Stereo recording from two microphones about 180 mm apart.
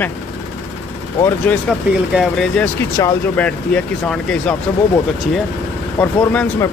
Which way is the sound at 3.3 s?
5° left (ahead or behind).